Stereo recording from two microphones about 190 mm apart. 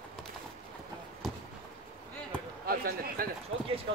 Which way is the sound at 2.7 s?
50° right (ahead or behind).